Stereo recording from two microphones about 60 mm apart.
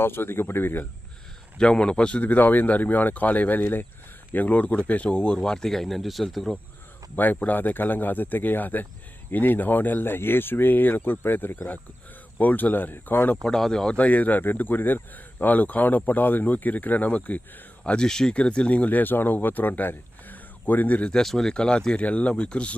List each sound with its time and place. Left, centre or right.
0.0 s speech: left
1.5 s speech: centre
7.3 s speech: left
13.3 s speech: centre
13.9 s speech: left
17.8 s speech: centre
21.1 s speech: centre